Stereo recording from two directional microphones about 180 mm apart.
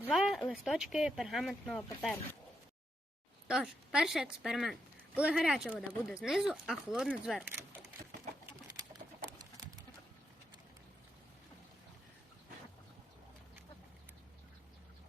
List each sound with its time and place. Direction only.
0.0 s a sound: 5° right (ahead or behind)
0.5 s speech: centre (ahead or behind)
3.4 s a woman's voice: 5° right (ahead or behind)
9.0 s pigeon: 50° right (ahead or behind)